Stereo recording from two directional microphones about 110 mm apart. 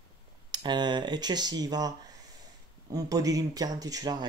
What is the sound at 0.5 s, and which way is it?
Speech, 45° right (ahead or behind).